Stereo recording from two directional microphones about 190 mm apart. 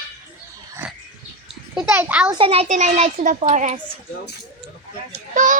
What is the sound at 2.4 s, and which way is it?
A woman's voice, 30° right (ahead or behind).